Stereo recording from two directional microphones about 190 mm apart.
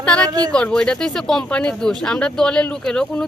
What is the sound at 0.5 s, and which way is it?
Speech, 5° left (ahead or behind).